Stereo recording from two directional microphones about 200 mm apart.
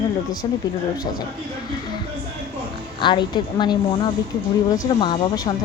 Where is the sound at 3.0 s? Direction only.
25° left (ahead or behind).